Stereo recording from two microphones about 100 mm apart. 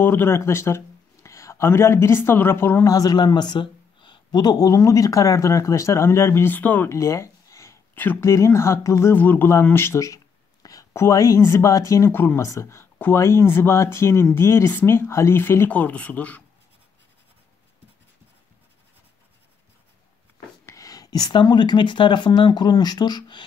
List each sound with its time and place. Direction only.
0.0 s speech: 20° left (ahead or behind)
2.9 s speech: 40° left (ahead or behind); by 6.9 s 20° left (ahead or behind)
6.9 s a sound: 30° left (ahead or behind)
7.9 s speech: 20° left (ahead or behind)
8.3 s speech: 30° left (ahead or behind)
20.6 s speech: 35° left (ahead or behind)